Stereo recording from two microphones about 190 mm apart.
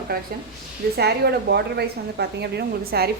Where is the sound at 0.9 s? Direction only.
60° right (ahead or behind).